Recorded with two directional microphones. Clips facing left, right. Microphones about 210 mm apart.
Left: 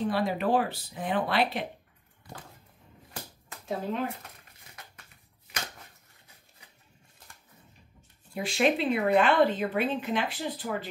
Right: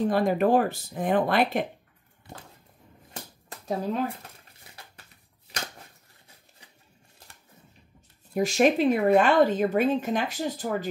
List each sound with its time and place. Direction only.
0.0 s speech: 45° right (ahead or behind)
3.4 s a sound: 35° right (ahead or behind)
8.4 s speech: 45° right (ahead or behind)